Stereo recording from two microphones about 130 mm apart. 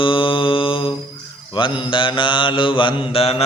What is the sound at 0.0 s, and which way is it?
Mantra, 40° left (ahead or behind).